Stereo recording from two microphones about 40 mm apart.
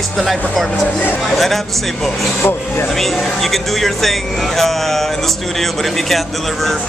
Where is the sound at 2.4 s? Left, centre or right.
Left.